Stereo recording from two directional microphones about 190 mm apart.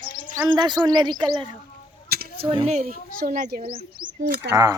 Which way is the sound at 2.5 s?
35° right (ahead or behind).